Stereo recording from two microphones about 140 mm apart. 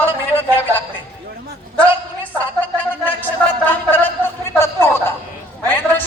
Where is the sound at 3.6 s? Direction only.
15° left (ahead or behind).